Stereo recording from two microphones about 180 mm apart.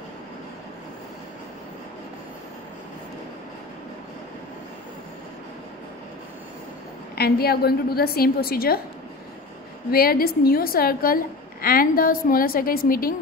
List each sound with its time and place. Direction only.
7.2 s a woman's voice: 60° left (ahead or behind)
9.8 s a woman's voice: 55° left (ahead or behind)